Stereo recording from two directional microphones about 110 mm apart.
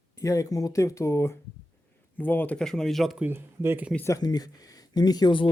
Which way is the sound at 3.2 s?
20° right (ahead or behind).